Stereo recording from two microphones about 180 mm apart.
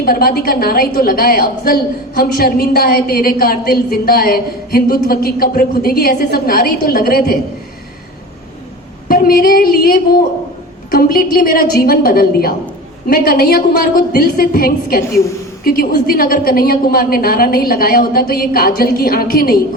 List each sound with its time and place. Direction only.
0.0 s a woman's voice: 55° left (ahead or behind)
9.0 s a woman's voice: 55° left (ahead or behind)